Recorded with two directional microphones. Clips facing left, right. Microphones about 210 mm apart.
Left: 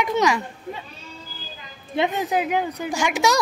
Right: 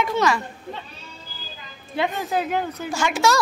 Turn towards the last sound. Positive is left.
turn(degrees=15)  # may be behind; listen again after turning